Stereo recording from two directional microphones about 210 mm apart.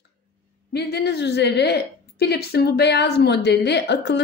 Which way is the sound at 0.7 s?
50° left (ahead or behind).